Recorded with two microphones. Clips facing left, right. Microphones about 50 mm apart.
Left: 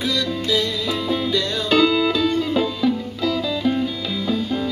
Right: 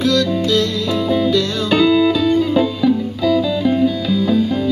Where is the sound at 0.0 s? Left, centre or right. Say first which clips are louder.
Right 7 dB; centre.